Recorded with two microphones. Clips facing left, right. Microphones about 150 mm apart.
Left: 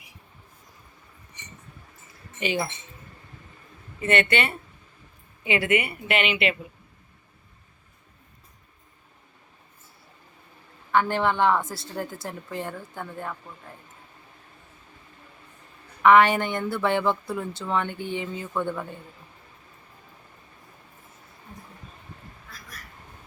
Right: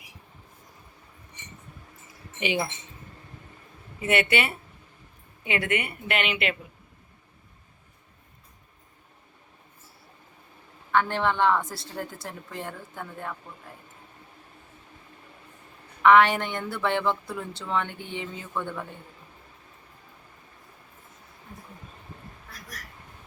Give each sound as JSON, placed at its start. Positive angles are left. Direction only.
{"t": 2.4, "sound": "speech", "side_deg": -15}
{"t": 4.0, "sound": "a woman's voice", "side_deg": -10}
{"t": 10.9, "sound": "a woman's voice", "side_deg": 5}
{"t": 16.0, "sound": "a woman's voice", "side_deg": 0}